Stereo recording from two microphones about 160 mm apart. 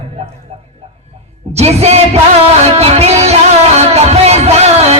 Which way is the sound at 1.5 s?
40° right (ahead or behind).